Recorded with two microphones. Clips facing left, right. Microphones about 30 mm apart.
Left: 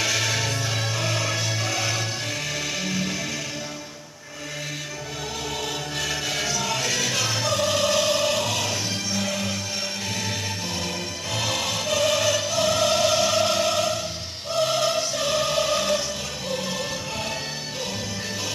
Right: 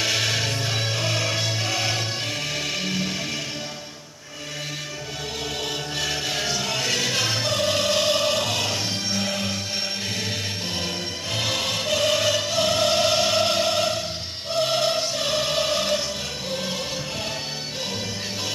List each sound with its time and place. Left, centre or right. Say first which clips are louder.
0.0 s music: right 1 dB; right
6.0 s music: right 1 dB; right
11.3 s music: right 1 dB; right
14.5 s choir: even; right
16.5 s music: left 1 dB; right